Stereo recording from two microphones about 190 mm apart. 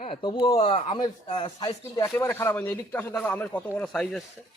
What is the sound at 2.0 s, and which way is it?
Speech, 15° left (ahead or behind).